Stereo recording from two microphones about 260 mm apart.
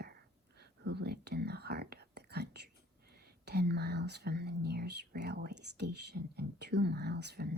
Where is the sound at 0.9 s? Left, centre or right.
Right.